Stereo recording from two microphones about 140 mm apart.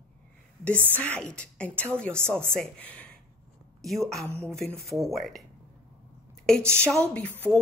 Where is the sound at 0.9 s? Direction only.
10° left (ahead or behind).